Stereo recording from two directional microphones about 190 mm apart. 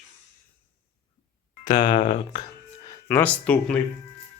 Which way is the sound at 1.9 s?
40° left (ahead or behind).